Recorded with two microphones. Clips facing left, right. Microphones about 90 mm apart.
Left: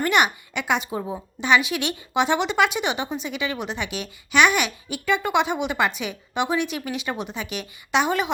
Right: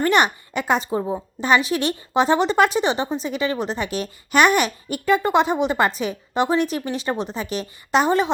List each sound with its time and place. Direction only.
0.0 s a woman's voice: 35° right (ahead or behind)
0.9 s a woman's voice: 20° right (ahead or behind)
1.4 s a woman's voice: 35° right (ahead or behind)